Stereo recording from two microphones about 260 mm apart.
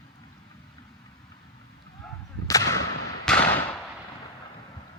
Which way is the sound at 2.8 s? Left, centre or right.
Left.